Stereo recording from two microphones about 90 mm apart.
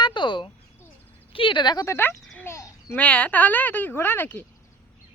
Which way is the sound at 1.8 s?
25° left (ahead or behind).